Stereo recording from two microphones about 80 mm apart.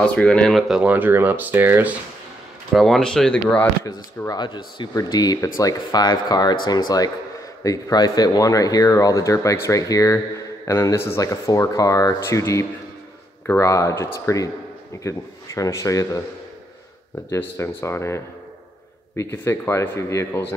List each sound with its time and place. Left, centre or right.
0.0 s speech: centre
0.5 s speech: centre
0.8 s speech: right
2.7 s speech: centre
4.3 s speech: left
4.9 s speech: left
17.4 s speech: left
19.3 s speech: left